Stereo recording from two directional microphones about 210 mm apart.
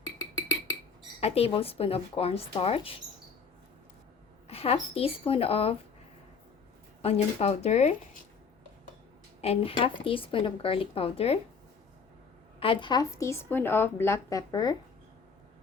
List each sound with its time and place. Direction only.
1.2 s speech: 30° left (ahead or behind)
4.4 s speech: 30° left (ahead or behind)
7.0 s speech: 30° left (ahead or behind)
9.4 s speech: 25° left (ahead or behind)
12.5 s a woman's voice: 25° left (ahead or behind)